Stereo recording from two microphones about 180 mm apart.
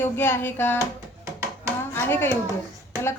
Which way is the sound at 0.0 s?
10° left (ahead or behind).